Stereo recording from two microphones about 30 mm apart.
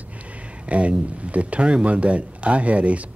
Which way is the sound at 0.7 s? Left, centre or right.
Right.